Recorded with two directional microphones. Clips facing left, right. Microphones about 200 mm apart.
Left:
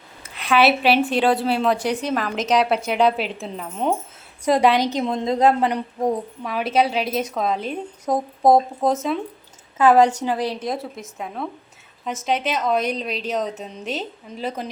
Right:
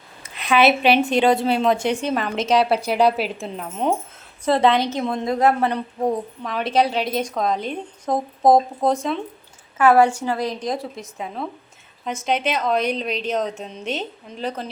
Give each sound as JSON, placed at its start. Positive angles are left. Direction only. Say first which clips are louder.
{"t": 0.4, "sound": "a woman's voice", "louder": "right 1 dB", "side_deg": 5}
{"t": 1.9, "sound": "a woman's voice", "louder": "right 1 dB", "side_deg": -30}
{"t": 2.1, "sound": "a woman's voice", "louder": "even", "side_deg": 0}
{"t": 4.4, "sound": "a woman's voice", "louder": "even", "side_deg": 10}
{"t": 9.7, "sound": "a woman's voice", "louder": "even", "side_deg": 15}